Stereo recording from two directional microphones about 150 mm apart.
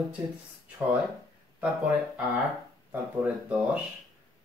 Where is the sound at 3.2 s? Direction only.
10° right (ahead or behind).